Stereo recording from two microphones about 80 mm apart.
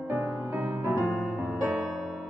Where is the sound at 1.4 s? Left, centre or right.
Right.